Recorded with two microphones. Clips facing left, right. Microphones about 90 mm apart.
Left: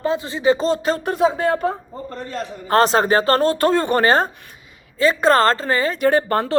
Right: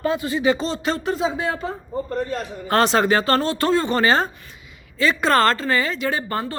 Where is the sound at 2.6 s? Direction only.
35° left (ahead or behind).